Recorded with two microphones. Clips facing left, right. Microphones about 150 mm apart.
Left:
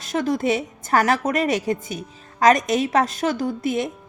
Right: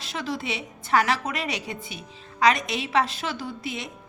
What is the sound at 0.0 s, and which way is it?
A woman's voice, 45° left (ahead or behind).